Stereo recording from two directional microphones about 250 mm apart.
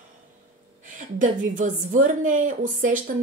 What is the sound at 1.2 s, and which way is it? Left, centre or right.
Speech, right.